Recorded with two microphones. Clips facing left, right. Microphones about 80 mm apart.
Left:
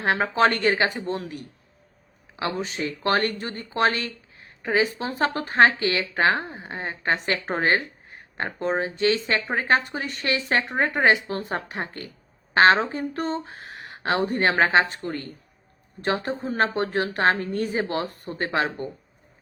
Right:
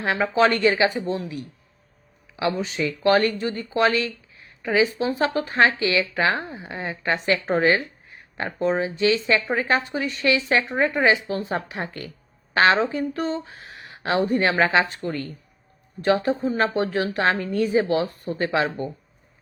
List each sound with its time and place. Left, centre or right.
0.0 s speech: left
2.4 s speech: left
16.0 s speech: left